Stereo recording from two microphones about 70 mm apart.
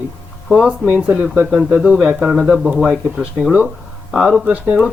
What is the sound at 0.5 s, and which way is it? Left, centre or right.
Speech, centre.